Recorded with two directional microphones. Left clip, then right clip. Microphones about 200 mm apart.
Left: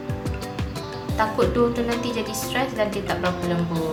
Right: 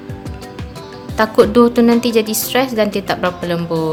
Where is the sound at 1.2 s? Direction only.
50° right (ahead or behind).